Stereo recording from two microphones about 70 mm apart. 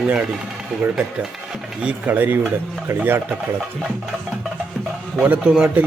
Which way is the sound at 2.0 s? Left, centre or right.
Right.